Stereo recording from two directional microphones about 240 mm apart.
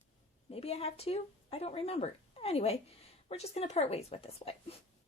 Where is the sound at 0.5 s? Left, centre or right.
Left.